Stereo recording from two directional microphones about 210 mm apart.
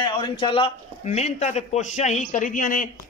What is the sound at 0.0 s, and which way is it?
A man's voice, 20° left (ahead or behind).